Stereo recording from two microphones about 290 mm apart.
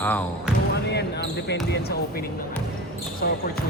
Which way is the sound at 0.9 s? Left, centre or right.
Left.